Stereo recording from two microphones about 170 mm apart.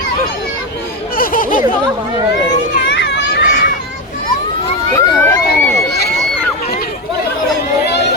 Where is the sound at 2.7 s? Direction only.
90° left.